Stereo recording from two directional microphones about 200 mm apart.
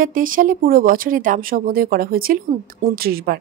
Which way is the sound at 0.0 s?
45° right (ahead or behind).